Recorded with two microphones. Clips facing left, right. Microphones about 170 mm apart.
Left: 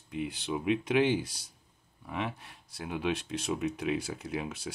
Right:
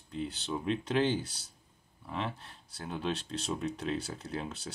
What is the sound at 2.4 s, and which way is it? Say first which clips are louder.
Speech: left 3 dB; 10° left (ahead or behind).